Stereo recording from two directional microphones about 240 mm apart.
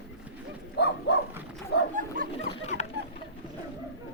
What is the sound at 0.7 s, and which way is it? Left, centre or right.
Livestock, left.